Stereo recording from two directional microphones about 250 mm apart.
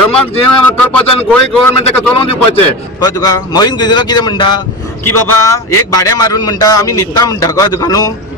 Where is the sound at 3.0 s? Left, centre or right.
Centre.